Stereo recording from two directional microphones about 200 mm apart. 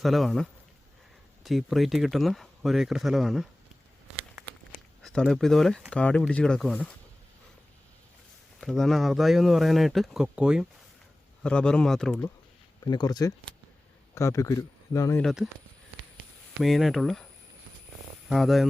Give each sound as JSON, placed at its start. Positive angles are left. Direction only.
{"t": 0.0, "sound": "speech", "side_deg": 0}
{"t": 4.7, "sound": "speech", "side_deg": 5}
{"t": 8.6, "sound": "speech", "side_deg": 0}
{"t": 12.8, "sound": "speech", "side_deg": 20}
{"t": 15.2, "sound": "speech", "side_deg": 0}
{"t": 16.6, "sound": "speech", "side_deg": 0}
{"t": 18.3, "sound": "speech", "side_deg": 0}